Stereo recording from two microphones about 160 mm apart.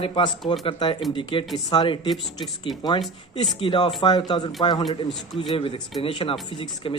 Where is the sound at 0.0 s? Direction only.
30° left (ahead or behind).